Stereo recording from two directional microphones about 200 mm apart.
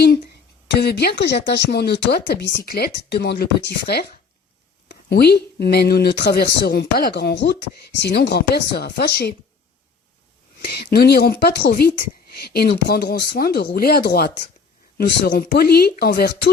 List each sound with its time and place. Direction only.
0.7 s speech: 55° left (ahead or behind)
10.9 s speech: 55° left (ahead or behind)